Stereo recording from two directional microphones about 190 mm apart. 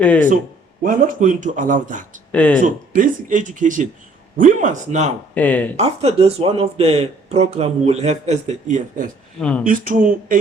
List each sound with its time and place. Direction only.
0.0 s speech: 5° left (ahead or behind)
0.8 s speech: 45° right (ahead or behind)
2.3 s speech: 5° left (ahead or behind)
2.6 s speech: 45° right (ahead or behind)
5.3 s speech: 5° left (ahead or behind)
5.7 s speech: 35° right (ahead or behind)
9.4 s speech: 5° left (ahead or behind)
9.6 s speech: 45° right (ahead or behind)